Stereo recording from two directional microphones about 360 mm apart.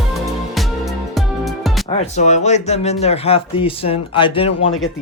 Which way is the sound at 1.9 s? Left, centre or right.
Centre.